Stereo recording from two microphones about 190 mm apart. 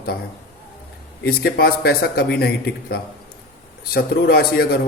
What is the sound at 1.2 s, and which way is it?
A man's voice, 55° left (ahead or behind).